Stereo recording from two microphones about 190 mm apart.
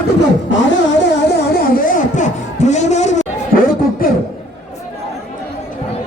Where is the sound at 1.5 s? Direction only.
45° left (ahead or behind).